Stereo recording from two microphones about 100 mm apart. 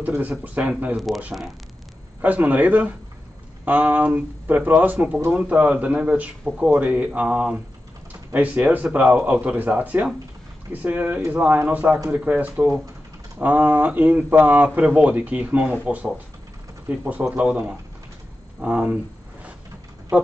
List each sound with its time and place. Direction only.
0.4 s speech: 15° right (ahead or behind)
2.2 s speech: 15° right (ahead or behind)
20.1 s speech: 10° right (ahead or behind)